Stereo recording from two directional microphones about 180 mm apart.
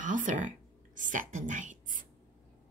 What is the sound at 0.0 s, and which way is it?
Speech, 45° right (ahead or behind).